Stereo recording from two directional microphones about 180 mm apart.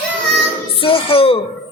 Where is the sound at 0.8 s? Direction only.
30° left (ahead or behind).